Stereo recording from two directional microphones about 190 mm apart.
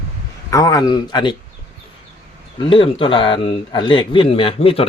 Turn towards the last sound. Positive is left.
turn(degrees=30)  # may be behind; listen again after turning